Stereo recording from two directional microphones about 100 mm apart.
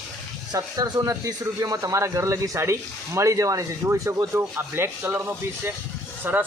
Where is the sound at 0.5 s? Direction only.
40° right (ahead or behind).